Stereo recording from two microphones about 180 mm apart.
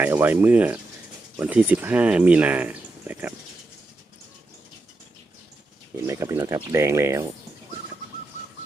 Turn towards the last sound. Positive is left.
turn(degrees=-15)  # may be behind; listen again after turning